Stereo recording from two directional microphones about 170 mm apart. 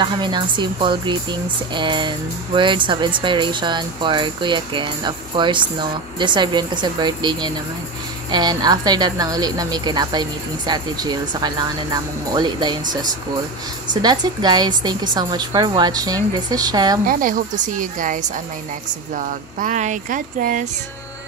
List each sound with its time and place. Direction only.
0.0 s speech: 25° right (ahead or behind)
14.0 s speech: 25° right (ahead or behind)
17.1 s speech: 50° right (ahead or behind)